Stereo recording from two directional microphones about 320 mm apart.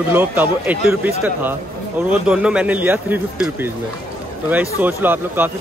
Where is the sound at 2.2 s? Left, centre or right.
Centre.